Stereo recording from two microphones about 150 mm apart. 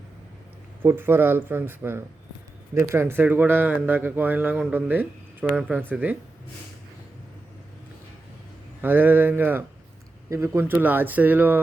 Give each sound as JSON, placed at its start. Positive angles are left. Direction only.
{"t": 0.8, "sound": "speech", "side_deg": -15}
{"t": 8.8, "sound": "speech", "side_deg": -10}